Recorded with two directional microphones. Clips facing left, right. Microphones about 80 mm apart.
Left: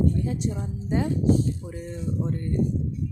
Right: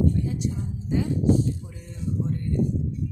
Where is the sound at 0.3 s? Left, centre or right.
Left.